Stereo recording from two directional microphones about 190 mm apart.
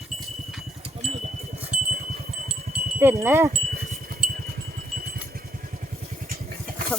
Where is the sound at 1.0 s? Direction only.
35° right (ahead or behind).